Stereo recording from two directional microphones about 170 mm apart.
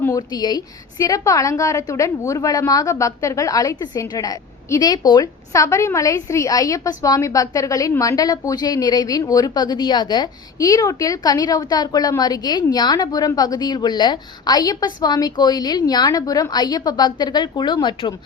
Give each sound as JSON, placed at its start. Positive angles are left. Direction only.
{"t": 0.0, "sound": "a woman's voice", "side_deg": 20}